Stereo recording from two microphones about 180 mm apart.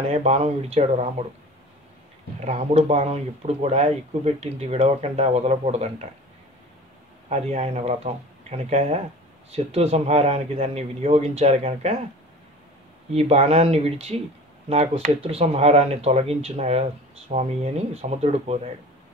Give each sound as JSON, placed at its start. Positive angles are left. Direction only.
{"t": 0.1, "sound": "speech", "side_deg": -35}
{"t": 2.4, "sound": "speech", "side_deg": -35}
{"t": 7.2, "sound": "speech", "side_deg": -35}
{"t": 13.1, "sound": "speech", "side_deg": -35}